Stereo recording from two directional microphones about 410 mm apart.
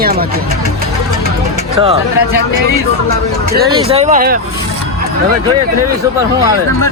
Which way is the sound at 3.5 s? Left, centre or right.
Centre.